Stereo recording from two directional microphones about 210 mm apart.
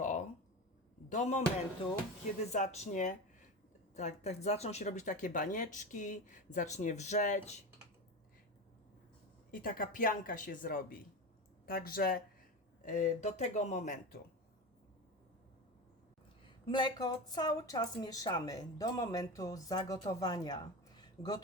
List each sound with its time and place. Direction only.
0.0 s a sound: 35° left (ahead or behind)
1.1 s speech: 35° left (ahead or behind)
2.5 s speech: 30° left (ahead or behind)
9.5 s speech: 40° left (ahead or behind)
16.6 s speech: 20° left (ahead or behind)